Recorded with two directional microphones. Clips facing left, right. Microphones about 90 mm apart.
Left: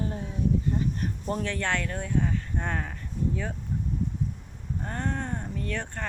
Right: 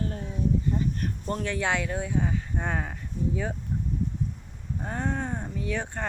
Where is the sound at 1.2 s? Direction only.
Centre (ahead or behind).